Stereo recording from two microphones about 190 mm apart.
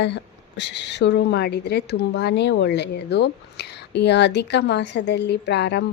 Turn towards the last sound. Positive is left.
turn(degrees=65)  # may be behind; listen again after turning